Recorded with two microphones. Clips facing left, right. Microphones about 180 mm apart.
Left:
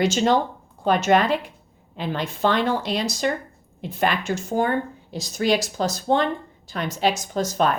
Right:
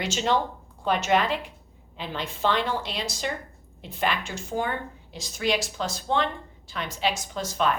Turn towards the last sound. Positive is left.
turn(degrees=45)  # may be behind; listen again after turning